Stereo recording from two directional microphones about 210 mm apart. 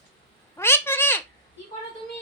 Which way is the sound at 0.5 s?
10° left (ahead or behind).